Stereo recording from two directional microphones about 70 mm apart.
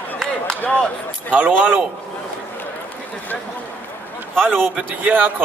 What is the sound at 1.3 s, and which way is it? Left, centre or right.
Speech, centre.